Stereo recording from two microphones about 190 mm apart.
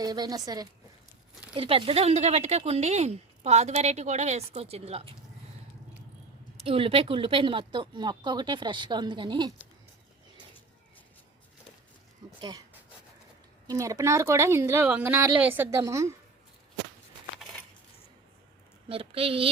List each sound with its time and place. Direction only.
0.0 s speech: 20° right (ahead or behind)
6.7 s speech: 30° right (ahead or behind)
12.4 s speech: 20° right (ahead or behind)
13.7 s a woman's voice: 15° right (ahead or behind)
18.9 s speech: 30° right (ahead or behind)